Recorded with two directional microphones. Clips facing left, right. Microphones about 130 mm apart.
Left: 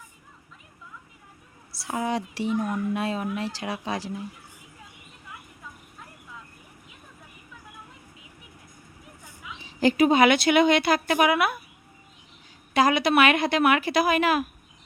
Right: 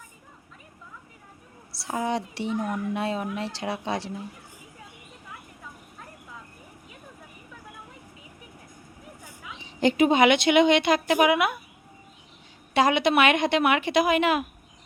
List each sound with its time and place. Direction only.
1.8 s speech: 25° right (ahead or behind)
9.6 s speech: 25° right (ahead or behind)
12.7 s speech: 25° right (ahead or behind)